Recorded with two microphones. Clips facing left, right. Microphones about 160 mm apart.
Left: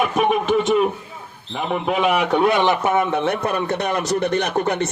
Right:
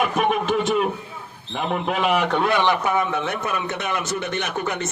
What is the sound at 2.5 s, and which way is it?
A man's voice, 20° left (ahead or behind).